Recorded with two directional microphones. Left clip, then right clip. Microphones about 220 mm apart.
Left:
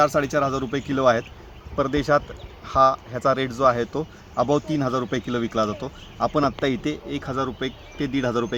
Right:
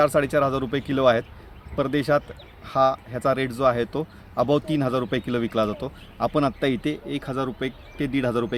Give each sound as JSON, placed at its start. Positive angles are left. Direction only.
{"t": 0.0, "sound": "speech", "side_deg": -20}
{"t": 1.7, "sound": "speech", "side_deg": -5}